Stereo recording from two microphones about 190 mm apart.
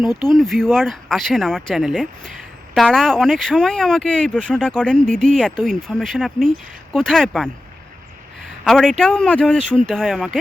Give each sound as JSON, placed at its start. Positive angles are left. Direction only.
{"t": 0.0, "sound": "speech", "side_deg": 20}
{"t": 0.3, "sound": "speech", "side_deg": 0}
{"t": 8.6, "sound": "speech", "side_deg": 0}